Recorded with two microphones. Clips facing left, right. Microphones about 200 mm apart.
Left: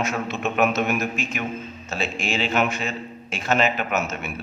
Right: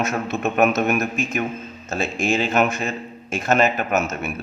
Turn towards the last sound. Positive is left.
turn(degrees=-45)  # may be behind; listen again after turning